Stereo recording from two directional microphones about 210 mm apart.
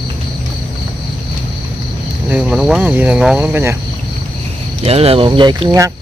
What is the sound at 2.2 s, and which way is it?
Speech, 5° right (ahead or behind).